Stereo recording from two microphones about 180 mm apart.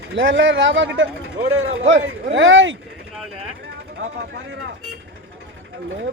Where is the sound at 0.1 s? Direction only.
85° right.